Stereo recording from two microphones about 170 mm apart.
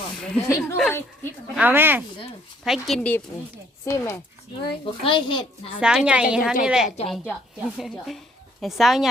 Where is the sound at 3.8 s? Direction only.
15° left (ahead or behind).